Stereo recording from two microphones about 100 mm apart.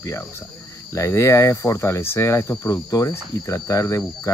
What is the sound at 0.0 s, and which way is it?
Speech, 30° left (ahead or behind).